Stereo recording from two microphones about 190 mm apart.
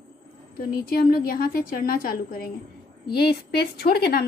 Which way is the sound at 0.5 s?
50° left (ahead or behind).